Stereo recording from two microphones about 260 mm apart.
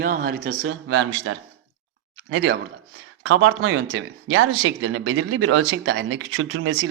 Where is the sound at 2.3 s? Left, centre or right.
Right.